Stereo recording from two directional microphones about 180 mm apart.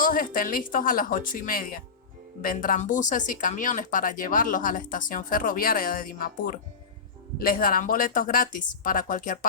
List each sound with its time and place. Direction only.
0.0 s speech: 50° left (ahead or behind)